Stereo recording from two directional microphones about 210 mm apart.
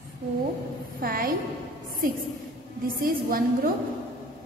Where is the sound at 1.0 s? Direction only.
45° right (ahead or behind).